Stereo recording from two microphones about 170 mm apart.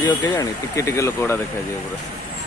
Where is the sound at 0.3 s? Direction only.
20° left (ahead or behind).